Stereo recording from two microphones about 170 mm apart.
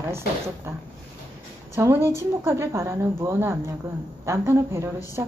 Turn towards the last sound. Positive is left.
turn(degrees=-15)  # may be behind; listen again after turning